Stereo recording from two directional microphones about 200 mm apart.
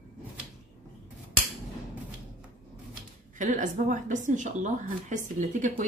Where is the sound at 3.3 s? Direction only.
40° right (ahead or behind).